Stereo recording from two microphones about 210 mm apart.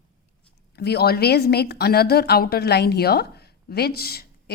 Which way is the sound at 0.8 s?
50° left (ahead or behind).